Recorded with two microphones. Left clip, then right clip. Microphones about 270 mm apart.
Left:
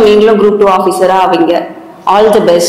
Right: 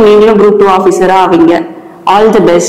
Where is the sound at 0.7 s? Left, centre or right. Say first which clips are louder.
Right 1 dB; right.